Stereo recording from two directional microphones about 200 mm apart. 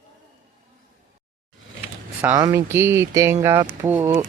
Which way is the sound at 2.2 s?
15° right (ahead or behind).